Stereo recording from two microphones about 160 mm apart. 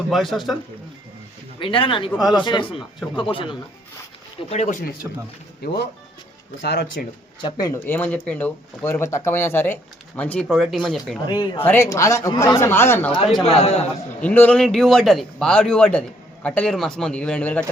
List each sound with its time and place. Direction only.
0.1 s speech: centre (ahead or behind)
1.5 s speech: 30° left (ahead or behind)
5.6 s speech: 90° left
7.4 s speech: 30° left (ahead or behind)
7.7 s speech: 15° left (ahead or behind)
11.3 s speech: 25° left (ahead or behind)
11.6 s speech: 15° left (ahead or behind)
13.4 s speech: 40° left (ahead or behind)
14.2 s speech: 10° left (ahead or behind)